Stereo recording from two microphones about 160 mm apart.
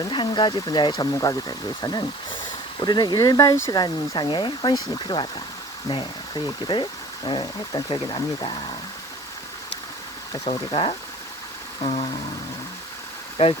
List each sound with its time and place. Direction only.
0.0 s speech: 30° left (ahead or behind)
10.4 s speech: 35° left (ahead or behind)
13.3 s speech: 30° left (ahead or behind)